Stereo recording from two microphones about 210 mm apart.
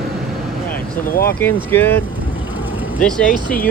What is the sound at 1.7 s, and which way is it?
Speech, 10° left (ahead or behind).